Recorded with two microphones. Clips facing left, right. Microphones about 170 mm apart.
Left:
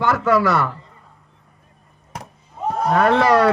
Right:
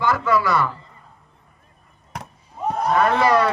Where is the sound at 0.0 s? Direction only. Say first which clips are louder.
Left 3 dB; 70° left (ahead or behind).